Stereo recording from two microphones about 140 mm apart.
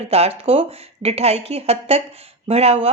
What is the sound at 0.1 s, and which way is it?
A woman's voice, 45° right (ahead or behind).